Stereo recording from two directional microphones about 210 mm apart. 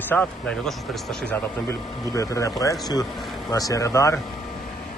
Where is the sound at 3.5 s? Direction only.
15° left (ahead or behind).